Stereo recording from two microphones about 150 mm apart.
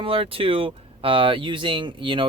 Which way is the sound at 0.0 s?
35° right (ahead or behind).